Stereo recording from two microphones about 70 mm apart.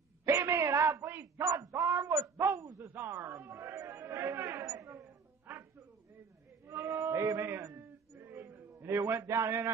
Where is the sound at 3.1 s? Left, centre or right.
Right.